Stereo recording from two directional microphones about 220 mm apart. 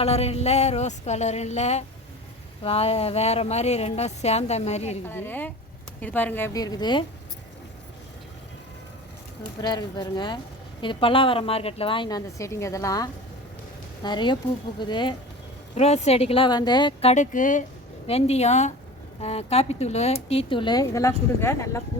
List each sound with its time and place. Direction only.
0.0 s a sound: 30° left (ahead or behind)
2.6 s speech: 25° left (ahead or behind)
5.0 s a woman's voice: 10° left (ahead or behind)
9.6 s speech: 20° left (ahead or behind)